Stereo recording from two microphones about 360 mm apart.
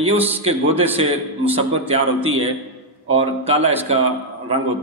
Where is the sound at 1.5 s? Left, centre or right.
Centre.